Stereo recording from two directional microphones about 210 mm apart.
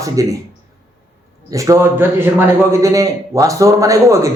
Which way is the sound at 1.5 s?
15° right (ahead or behind).